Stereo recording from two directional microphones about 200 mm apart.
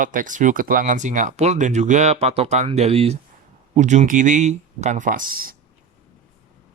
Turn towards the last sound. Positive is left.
turn(degrees=-45)  # may be behind; listen again after turning